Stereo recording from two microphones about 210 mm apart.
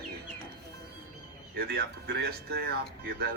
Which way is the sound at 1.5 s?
50° right (ahead or behind).